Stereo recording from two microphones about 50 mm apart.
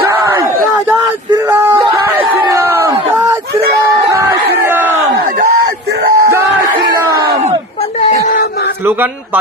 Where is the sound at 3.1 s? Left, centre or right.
Right.